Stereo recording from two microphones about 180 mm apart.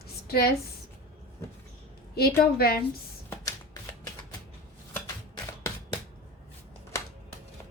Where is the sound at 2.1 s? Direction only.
60° left (ahead or behind).